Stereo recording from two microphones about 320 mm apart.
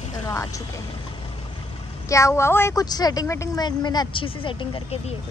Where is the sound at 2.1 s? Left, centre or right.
Centre.